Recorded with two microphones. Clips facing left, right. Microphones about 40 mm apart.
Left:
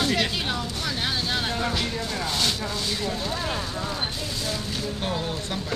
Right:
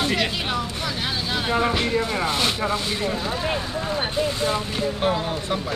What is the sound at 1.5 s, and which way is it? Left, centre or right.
Speech, right.